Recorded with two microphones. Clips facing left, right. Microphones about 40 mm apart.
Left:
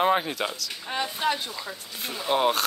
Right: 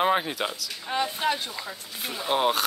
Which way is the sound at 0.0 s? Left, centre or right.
Centre.